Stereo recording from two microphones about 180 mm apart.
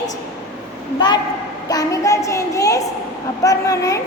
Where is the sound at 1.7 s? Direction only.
20° left (ahead or behind).